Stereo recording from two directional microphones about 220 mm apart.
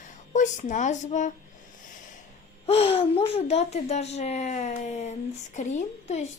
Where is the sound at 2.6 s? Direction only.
25° left (ahead or behind).